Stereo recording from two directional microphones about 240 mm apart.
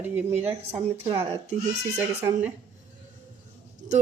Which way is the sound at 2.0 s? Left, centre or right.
Centre.